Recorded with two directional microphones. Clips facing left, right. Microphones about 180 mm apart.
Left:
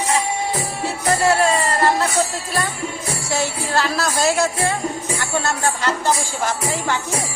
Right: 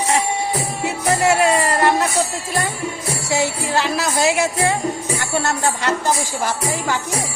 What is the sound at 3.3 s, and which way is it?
Speech, 15° right (ahead or behind).